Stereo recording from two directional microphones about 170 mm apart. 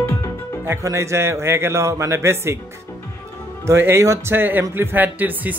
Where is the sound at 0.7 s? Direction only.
15° right (ahead or behind).